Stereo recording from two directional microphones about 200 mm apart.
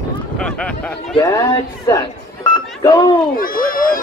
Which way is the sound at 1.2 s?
15° left (ahead or behind).